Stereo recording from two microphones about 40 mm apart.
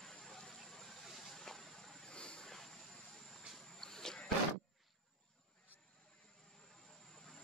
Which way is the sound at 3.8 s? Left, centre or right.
Centre.